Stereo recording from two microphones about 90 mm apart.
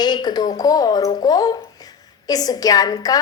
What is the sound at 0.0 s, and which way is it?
A woman's voice, 50° left (ahead or behind).